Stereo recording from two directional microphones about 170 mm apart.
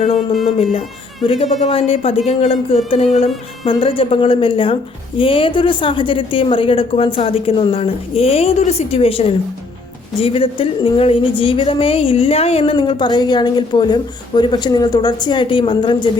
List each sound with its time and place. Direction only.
0.4 s a woman's voice: 35° left (ahead or behind)